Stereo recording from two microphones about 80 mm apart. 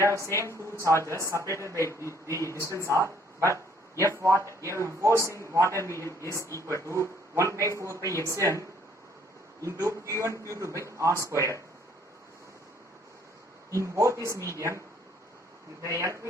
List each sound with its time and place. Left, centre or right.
0.0 s speech: right
1.8 s speech: left
2.2 s speech: right
6.0 s speech: left
6.8 s speech: right
13.7 s speech: right
15.8 s speech: right